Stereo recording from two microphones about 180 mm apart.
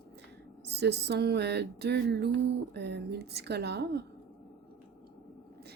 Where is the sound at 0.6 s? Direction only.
65° right (ahead or behind).